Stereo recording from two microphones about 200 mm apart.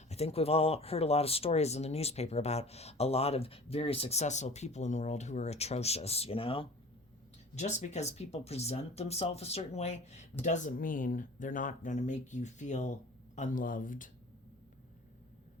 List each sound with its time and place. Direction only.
0.1 s speech: 30° left (ahead or behind)